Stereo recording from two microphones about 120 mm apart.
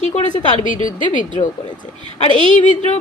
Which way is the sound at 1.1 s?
90° left.